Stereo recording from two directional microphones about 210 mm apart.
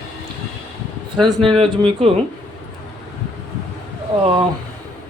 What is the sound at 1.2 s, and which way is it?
Speech, 25° right (ahead or behind).